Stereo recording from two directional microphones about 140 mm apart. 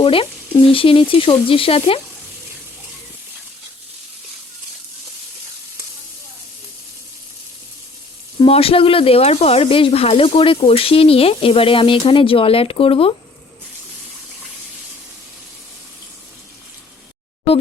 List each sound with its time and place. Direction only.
0.0 s speech: 40° left (ahead or behind)
8.4 s speech: 40° left (ahead or behind)